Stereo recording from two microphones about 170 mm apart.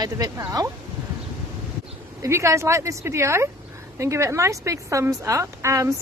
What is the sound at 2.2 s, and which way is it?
Speech, 15° right (ahead or behind).